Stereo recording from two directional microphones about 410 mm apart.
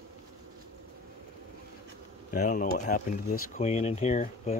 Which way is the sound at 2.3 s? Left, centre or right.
Centre.